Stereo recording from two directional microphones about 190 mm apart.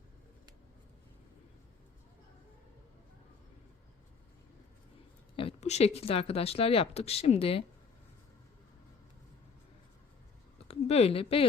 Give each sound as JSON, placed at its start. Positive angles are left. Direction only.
{"t": 5.4, "sound": "speech", "side_deg": 30}
{"t": 10.7, "sound": "speech", "side_deg": 35}